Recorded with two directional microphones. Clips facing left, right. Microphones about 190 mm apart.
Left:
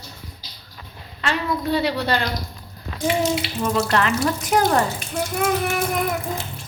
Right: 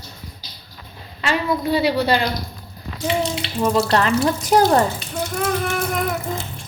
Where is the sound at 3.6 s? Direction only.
35° right (ahead or behind).